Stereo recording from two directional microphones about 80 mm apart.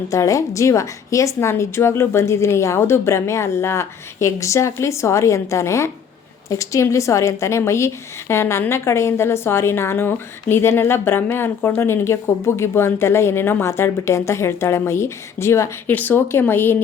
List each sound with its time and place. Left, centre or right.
0.1 s a woman's voice: left
15.9 s speech: left